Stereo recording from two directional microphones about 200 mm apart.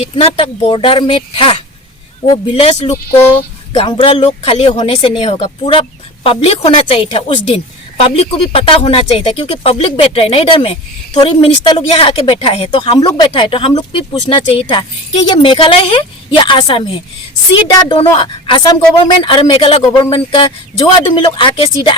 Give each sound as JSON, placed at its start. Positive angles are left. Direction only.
{"t": 0.2, "sound": "speech", "side_deg": 30}